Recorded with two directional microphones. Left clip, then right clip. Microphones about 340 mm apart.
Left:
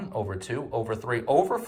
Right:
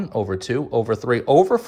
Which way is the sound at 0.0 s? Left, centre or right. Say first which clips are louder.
Right 8 dB; centre.